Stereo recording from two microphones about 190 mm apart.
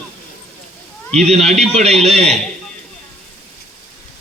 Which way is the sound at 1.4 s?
35° right (ahead or behind).